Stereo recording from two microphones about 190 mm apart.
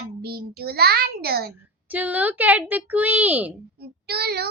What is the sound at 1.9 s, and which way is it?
A woman's voice, 10° right (ahead or behind).